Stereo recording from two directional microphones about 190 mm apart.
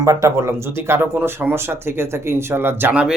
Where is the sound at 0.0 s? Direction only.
15° right (ahead or behind).